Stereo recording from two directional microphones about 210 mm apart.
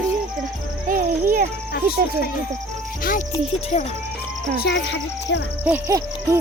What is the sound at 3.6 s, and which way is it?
Speech, 30° left (ahead or behind).